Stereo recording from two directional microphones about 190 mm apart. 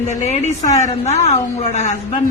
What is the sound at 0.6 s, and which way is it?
Speech, 15° left (ahead or behind).